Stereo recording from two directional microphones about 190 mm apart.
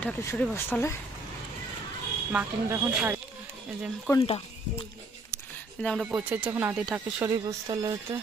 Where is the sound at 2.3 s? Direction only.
10° right (ahead or behind).